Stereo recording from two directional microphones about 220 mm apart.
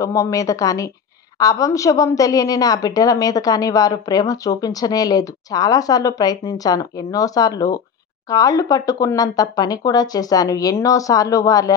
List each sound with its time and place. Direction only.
0.0 s a woman's voice: 15° left (ahead or behind)